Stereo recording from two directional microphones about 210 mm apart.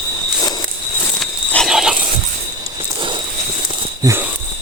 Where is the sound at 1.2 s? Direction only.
Centre (ahead or behind).